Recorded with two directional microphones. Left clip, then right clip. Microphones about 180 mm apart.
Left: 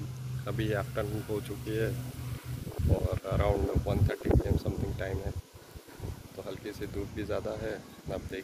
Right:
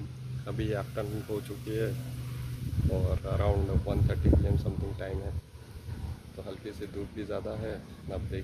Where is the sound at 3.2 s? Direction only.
Centre (ahead or behind).